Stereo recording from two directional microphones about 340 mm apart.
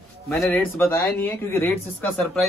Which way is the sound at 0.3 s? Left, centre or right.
Centre.